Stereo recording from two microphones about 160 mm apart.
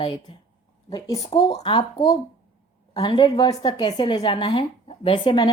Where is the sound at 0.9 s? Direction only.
20° left (ahead or behind).